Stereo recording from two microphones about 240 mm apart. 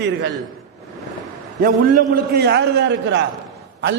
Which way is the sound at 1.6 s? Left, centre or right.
Right.